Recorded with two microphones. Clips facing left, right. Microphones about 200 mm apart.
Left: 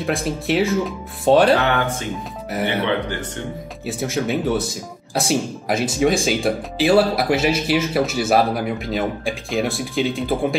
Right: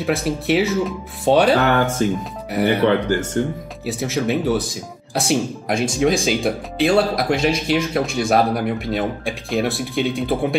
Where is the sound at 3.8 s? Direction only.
Centre (ahead or behind).